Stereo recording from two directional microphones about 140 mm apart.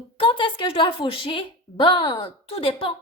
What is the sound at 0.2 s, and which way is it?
A woman's voice, 35° left (ahead or behind).